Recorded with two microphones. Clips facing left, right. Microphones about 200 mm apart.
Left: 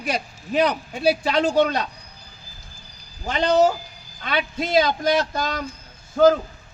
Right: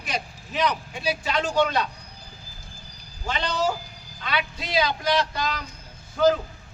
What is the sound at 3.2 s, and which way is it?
A man's voice, 50° left (ahead or behind).